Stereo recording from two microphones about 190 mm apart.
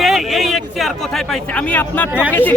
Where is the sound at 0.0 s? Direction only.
Centre (ahead or behind).